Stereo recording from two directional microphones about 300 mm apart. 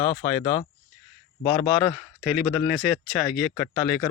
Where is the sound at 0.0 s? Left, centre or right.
Left.